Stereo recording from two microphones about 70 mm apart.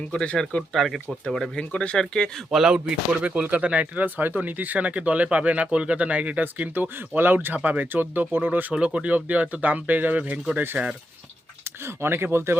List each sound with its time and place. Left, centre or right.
0.1 s speech: centre
2.5 s speech: centre
3.2 s speech: right
8.7 s speech: centre
12.0 s speech: right